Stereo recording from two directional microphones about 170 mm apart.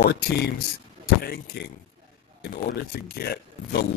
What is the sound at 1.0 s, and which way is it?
Vehicle, 60° left (ahead or behind).